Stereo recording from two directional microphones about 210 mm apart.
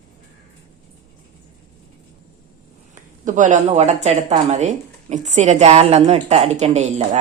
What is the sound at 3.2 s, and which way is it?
Speech, 35° right (ahead or behind).